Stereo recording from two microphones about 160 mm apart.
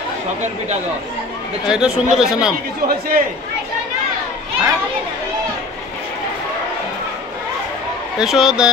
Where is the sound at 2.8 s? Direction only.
65° right (ahead or behind).